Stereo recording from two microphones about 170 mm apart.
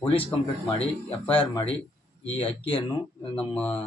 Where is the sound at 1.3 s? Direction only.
30° left (ahead or behind).